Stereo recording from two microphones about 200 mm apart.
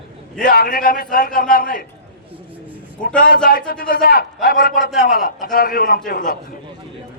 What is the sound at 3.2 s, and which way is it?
A man's voice, 45° left (ahead or behind).